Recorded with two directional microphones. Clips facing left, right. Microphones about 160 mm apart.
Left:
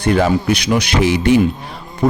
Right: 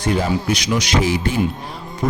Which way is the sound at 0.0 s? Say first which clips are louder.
Left 5 dB; 65° left (ahead or behind).